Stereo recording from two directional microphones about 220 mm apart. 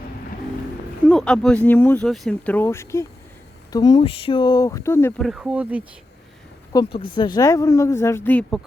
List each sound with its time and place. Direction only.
1.0 s speech: 5° left (ahead or behind)
5.2 s speech: 5° right (ahead or behind)
6.7 s speech: 20° left (ahead or behind); by 8.6 s 5° left (ahead or behind)